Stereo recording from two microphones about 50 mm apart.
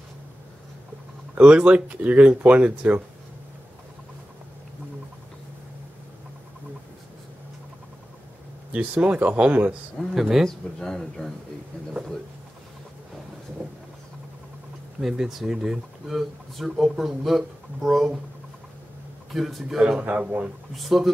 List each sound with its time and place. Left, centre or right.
1.4 s speech: right
8.7 s speech: right
10.0 s speech: centre
15.0 s speech: centre
19.3 s a man's voice: centre
19.8 s speech: right
20.7 s a man's voice: centre